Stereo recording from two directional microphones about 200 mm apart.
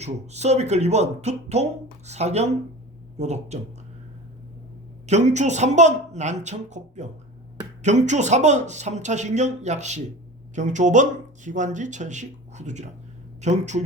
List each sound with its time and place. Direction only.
0.0 s speech: 35° right (ahead or behind)
5.0 s speech: 35° right (ahead or behind)